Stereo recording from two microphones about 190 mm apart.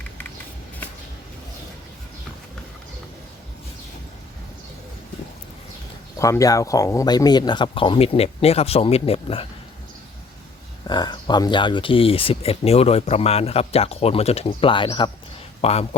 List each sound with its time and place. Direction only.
6.1 s speech: 15° left (ahead or behind)
10.8 s speech: 25° left (ahead or behind)